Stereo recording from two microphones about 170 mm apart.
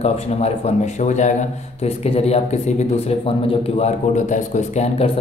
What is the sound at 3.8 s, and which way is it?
A man's voice, 45° left (ahead or behind).